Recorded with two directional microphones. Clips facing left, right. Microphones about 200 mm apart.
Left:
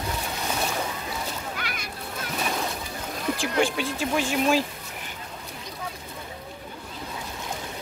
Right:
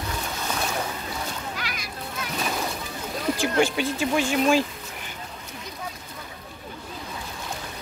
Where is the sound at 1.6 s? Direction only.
55° left (ahead or behind).